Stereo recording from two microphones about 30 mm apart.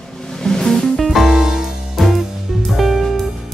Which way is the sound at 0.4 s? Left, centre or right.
Centre.